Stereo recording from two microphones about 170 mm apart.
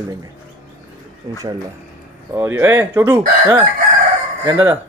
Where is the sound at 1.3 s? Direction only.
25° right (ahead or behind).